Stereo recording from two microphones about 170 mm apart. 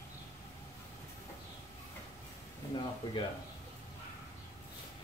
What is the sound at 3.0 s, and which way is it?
Speech, 20° left (ahead or behind).